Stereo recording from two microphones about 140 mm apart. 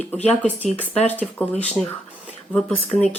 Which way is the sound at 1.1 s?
15° left (ahead or behind).